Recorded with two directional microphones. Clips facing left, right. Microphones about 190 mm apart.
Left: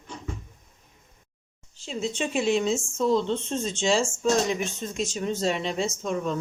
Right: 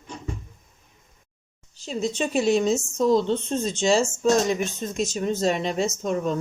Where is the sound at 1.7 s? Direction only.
40° right (ahead or behind).